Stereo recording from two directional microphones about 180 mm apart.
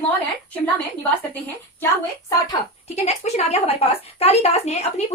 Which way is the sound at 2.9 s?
40° left (ahead or behind).